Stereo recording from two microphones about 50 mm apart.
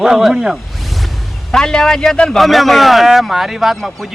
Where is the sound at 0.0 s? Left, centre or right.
Centre.